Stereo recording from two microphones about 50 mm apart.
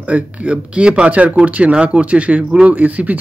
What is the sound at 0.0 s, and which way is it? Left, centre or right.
Speech, right.